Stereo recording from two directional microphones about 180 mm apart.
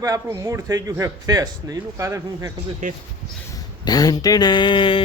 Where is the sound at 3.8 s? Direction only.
20° left (ahead or behind).